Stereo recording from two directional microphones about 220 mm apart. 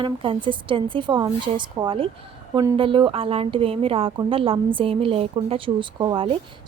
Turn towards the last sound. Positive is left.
turn(degrees=-25)  # may be behind; listen again after turning